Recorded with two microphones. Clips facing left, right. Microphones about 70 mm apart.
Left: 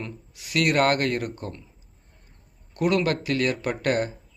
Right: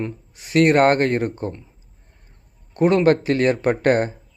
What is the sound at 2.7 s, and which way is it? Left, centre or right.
Speech, right.